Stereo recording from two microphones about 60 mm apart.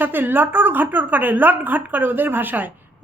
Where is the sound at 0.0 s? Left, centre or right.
Right.